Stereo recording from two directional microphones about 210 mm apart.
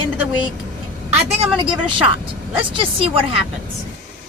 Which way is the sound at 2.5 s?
25° right (ahead or behind).